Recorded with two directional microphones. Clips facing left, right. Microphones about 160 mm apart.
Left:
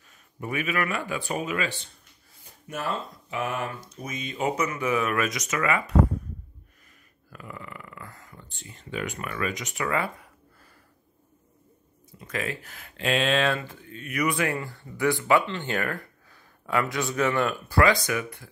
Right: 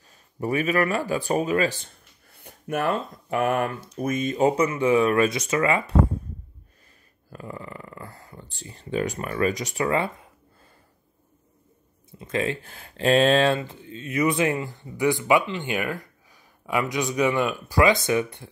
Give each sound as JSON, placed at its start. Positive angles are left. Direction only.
{"t": 0.1, "sound": "speech", "side_deg": -35}
{"t": 7.2, "sound": "a sound", "side_deg": -30}
{"t": 12.1, "sound": "speech", "side_deg": -25}